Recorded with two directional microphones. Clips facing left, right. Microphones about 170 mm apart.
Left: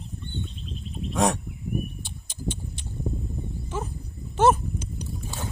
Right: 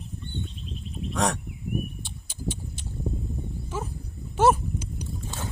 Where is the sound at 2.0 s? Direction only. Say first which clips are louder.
Left 1 dB; centre (ahead or behind).